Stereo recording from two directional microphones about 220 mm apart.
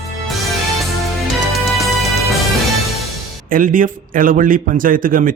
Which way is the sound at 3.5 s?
40° right (ahead or behind).